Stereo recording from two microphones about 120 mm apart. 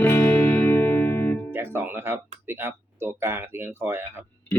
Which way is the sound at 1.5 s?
20° right (ahead or behind).